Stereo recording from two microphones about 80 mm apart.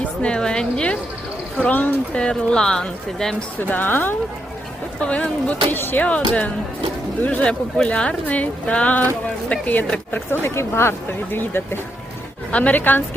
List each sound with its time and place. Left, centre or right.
0.0 s speech: centre
3.6 s a woman's voice: left
4.9 s a woman's voice: centre
10.4 s speech: left
12.5 s a woman's voice: centre